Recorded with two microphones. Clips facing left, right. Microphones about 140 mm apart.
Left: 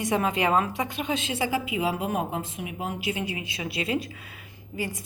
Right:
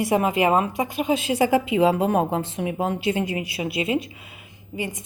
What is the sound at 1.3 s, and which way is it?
A woman's voice, 45° right (ahead or behind).